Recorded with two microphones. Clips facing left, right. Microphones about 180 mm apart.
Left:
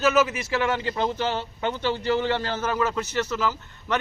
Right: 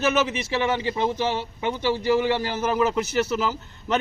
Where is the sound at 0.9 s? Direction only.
10° right (ahead or behind).